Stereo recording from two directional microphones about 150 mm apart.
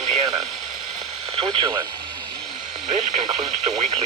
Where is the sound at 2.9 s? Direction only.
50° right (ahead or behind).